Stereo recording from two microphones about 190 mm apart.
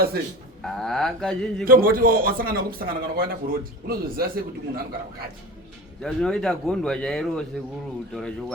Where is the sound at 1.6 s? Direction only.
50° right (ahead or behind).